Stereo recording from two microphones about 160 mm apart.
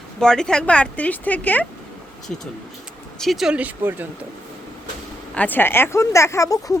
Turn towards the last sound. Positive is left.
turn(degrees=20)  # may be behind; listen again after turning